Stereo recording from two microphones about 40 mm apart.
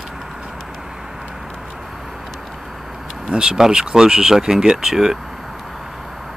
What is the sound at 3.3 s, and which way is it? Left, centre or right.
Speech, centre.